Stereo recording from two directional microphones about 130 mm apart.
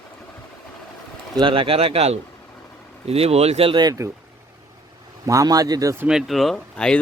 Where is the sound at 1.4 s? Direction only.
40° right (ahead or behind).